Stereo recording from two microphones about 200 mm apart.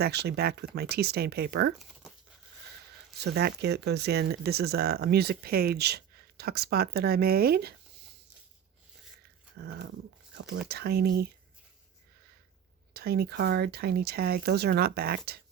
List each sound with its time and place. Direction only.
0.0 s speech: 55° right (ahead or behind)
1.8 s tearing: centre (ahead or behind)
3.2 s speech: 55° right (ahead or behind)
9.6 s speech: 50° right (ahead or behind)
12.9 s speech: 50° right (ahead or behind)